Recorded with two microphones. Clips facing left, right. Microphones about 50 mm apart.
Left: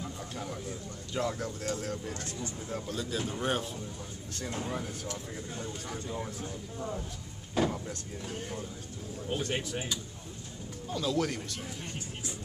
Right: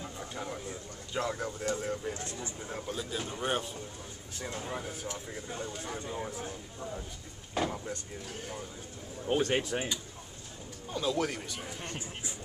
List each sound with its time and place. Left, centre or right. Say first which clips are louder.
0.0 s speech: even; centre
7.5 s speech: left 2 dB; centre
9.5 s speech: right 4 dB; right
10.9 s speech: left 1 dB; centre